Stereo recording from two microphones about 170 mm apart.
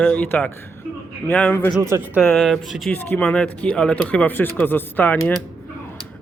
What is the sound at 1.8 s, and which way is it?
Speech, 15° right (ahead or behind).